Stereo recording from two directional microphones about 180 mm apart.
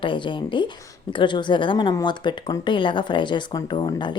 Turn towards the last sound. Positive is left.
turn(degrees=25)  # may be behind; listen again after turning